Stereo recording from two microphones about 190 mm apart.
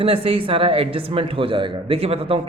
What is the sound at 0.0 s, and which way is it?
A man's voice, 30° right (ahead or behind).